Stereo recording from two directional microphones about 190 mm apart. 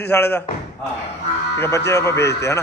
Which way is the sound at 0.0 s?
10° left (ahead or behind).